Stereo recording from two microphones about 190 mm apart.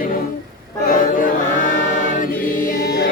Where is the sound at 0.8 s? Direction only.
45° left (ahead or behind).